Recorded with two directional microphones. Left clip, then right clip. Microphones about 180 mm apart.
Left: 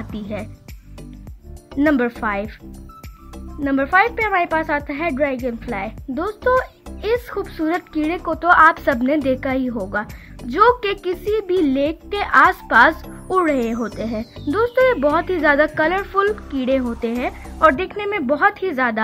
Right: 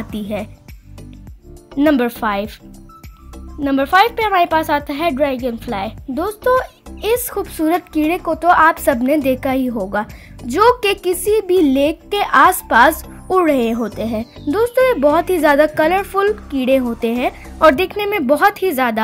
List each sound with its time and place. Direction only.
0.1 s speech: 30° right (ahead or behind)
1.8 s speech: 25° right (ahead or behind)
3.6 s speech: 25° right (ahead or behind)